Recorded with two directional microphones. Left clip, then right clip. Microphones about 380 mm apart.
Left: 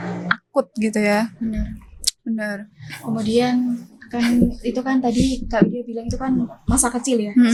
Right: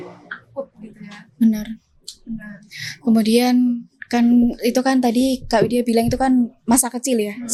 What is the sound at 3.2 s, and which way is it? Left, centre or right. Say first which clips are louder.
Speech: even; right.